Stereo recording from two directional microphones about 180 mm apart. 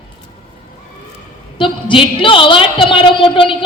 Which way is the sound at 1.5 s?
30° left (ahead or behind).